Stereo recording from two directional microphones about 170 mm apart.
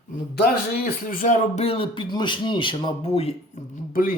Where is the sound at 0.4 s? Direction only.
60° left (ahead or behind); by 3.3 s 35° left (ahead or behind).